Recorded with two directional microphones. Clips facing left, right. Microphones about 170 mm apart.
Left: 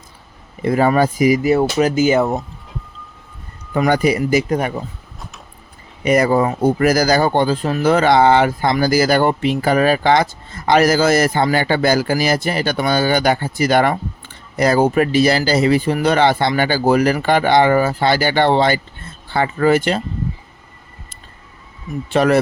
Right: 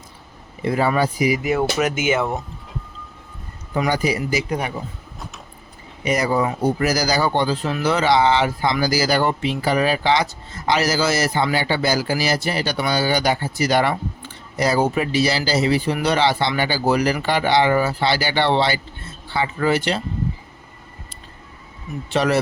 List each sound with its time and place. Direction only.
0.6 s speech: 50° left (ahead or behind)
3.8 s speech: 55° left (ahead or behind)
6.1 s speech: 55° left (ahead or behind)
22.1 s speech: 55° left (ahead or behind)